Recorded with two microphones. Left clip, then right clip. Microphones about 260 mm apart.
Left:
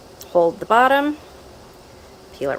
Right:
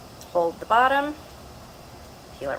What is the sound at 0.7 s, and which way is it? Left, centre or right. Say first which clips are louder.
Speech: left 4 dB; left.